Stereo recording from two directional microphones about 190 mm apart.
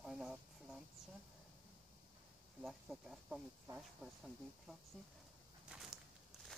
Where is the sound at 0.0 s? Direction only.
Centre (ahead or behind).